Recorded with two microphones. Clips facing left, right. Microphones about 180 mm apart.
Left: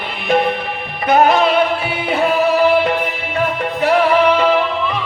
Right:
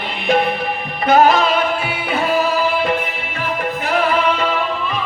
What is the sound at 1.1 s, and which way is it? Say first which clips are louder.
Music: left 1 dB; 65° left (ahead or behind).